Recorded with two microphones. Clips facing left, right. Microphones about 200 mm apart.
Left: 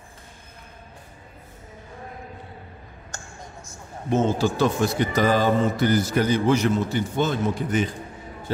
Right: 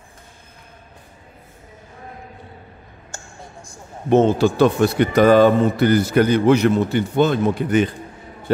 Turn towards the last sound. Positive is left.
turn(degrees=-65)  # may be behind; listen again after turning